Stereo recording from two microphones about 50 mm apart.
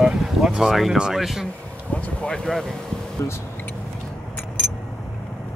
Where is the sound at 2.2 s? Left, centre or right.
Centre.